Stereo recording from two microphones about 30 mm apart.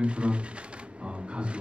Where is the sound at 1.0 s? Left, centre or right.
Right.